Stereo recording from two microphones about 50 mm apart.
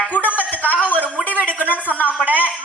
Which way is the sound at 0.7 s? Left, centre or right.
Left.